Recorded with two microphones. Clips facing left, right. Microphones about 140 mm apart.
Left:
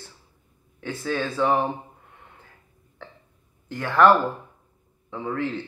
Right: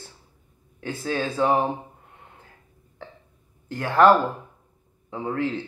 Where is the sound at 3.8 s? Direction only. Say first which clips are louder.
Right 1 dB; 40° right (ahead or behind).